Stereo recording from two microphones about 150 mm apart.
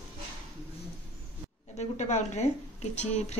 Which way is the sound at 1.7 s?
50° left (ahead or behind).